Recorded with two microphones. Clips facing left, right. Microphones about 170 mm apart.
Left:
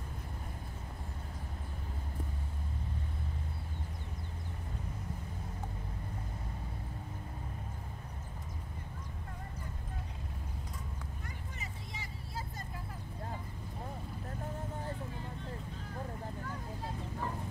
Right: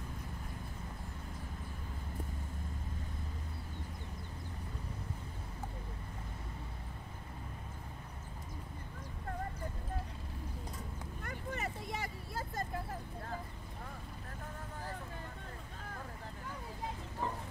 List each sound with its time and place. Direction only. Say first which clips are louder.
11.2 s vehicle: right 6 dB; 60° right (ahead or behind)